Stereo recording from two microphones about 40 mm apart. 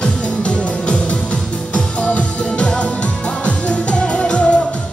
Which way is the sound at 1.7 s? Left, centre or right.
Left.